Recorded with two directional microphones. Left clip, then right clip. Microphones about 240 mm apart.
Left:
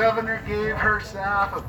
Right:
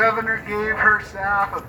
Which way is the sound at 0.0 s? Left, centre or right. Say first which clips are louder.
Right 3 dB; centre.